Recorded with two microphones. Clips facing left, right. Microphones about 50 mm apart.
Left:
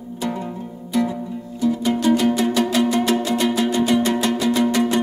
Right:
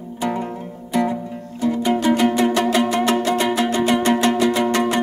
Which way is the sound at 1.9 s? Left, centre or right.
Right.